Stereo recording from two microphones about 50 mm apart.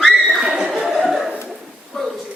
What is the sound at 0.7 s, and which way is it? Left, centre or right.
Chuckle, centre.